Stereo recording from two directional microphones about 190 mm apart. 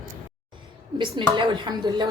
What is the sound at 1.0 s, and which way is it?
Speech, 25° right (ahead or behind).